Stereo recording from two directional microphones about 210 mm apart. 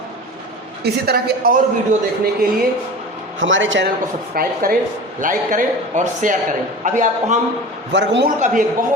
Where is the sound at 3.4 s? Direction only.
65° right (ahead or behind).